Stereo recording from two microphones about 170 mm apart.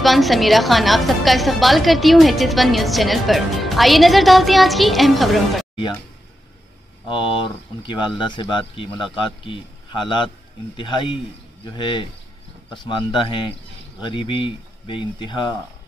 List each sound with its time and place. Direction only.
0.0 s a woman's voice: centre (ahead or behind)
7.1 s a man's voice: 30° left (ahead or behind)